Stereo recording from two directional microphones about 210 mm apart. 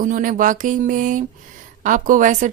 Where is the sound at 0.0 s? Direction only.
40° right (ahead or behind).